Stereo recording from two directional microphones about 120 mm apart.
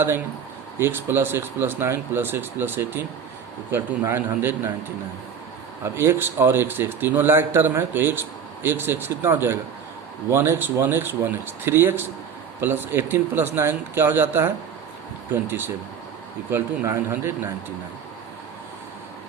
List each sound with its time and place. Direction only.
0.8 s a man's voice: 20° right (ahead or behind)
5.8 s a man's voice: 20° right (ahead or behind)